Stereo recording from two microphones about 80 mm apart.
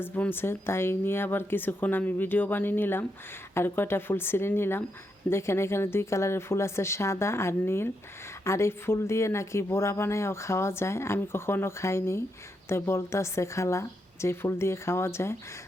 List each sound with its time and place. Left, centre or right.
0.3 s a woman's voice: left